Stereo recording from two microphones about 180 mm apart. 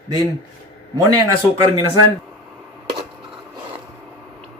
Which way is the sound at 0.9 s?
20° right (ahead or behind).